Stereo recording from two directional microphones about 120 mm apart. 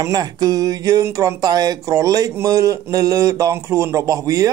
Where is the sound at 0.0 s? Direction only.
30° right (ahead or behind).